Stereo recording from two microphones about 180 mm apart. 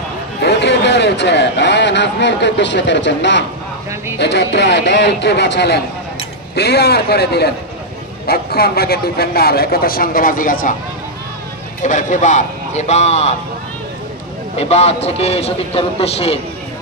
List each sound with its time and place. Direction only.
0.4 s a sound: 65° left (ahead or behind)
4.2 s a man's voice: 75° left (ahead or behind); by 10.8 s 50° left (ahead or behind)
11.8 s a man's voice: 45° left (ahead or behind)
14.6 s a man's voice: 35° left (ahead or behind)